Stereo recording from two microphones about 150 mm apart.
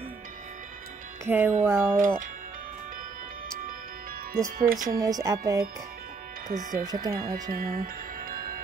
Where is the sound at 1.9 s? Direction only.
60° right (ahead or behind).